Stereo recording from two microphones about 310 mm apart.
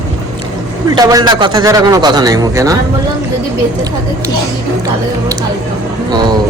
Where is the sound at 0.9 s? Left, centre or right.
Centre.